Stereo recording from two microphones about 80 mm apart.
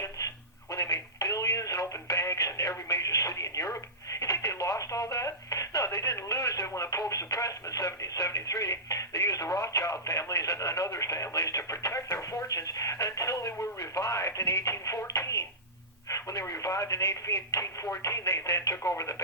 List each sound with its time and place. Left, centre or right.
0.7 s a sound: left
4.1 s telephone: left
9.6 s radio: left
13.7 s music: left
16.0 s speech: left